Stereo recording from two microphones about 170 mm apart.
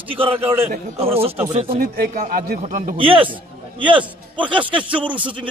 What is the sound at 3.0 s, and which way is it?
Speech, 30° right (ahead or behind).